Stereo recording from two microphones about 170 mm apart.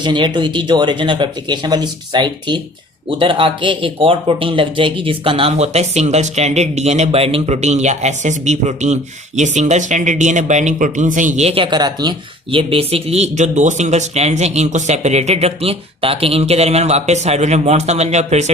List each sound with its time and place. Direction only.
0.0 s speech: 25° right (ahead or behind)